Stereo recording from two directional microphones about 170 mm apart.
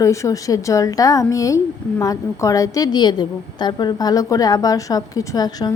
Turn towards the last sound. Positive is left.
turn(degrees=20)  # may be behind; listen again after turning